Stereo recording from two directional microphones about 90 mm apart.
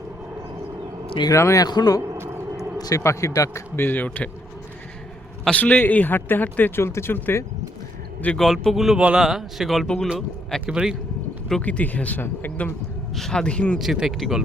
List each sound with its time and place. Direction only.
1.3 s a man's voice: 35° left (ahead or behind)
1.6 s a man's voice: 50° left (ahead or behind)
2.1 s a sound: 25° right (ahead or behind)
2.7 s a sound: 45° left (ahead or behind)
3.0 s a man's voice: 30° left (ahead or behind)
5.5 s a man's voice: 15° left (ahead or behind)
8.4 s speech: centre (ahead or behind)
10.1 s speech: 5° right (ahead or behind)
11.6 s speech: 15° left (ahead or behind)
13.1 s speech: 5° left (ahead or behind)
13.7 s speech: 5° right (ahead or behind)